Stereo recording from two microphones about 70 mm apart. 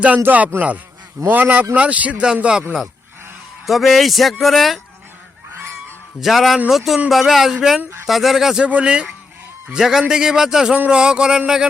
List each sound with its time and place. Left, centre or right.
0.2 s a man's voice: right
3.7 s speech: centre
6.1 s a man's voice: centre